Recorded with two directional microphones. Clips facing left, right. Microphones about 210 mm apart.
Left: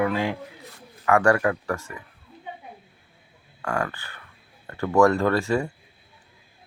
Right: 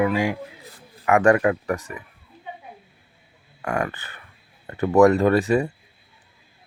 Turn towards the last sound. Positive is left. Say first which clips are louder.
# right 4 dB
turn(degrees=-20)  # may be behind; listen again after turning